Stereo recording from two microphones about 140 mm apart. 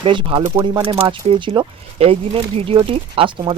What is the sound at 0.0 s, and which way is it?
Speech, 40° right (ahead or behind).